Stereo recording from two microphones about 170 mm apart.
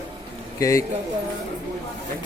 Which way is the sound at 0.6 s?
20° left (ahead or behind).